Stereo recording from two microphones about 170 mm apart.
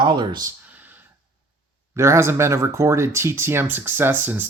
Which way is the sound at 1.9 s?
15° right (ahead or behind).